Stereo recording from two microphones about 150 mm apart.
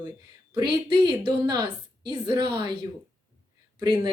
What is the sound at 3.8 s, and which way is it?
Speech, 25° right (ahead or behind).